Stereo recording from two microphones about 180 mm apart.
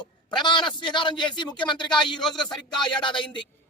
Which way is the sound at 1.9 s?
Centre (ahead or behind).